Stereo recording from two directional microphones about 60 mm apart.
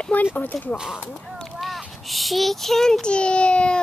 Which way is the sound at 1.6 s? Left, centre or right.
Centre.